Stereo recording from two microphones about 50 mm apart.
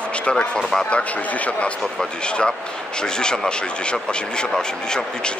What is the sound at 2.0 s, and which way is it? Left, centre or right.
Speech, centre.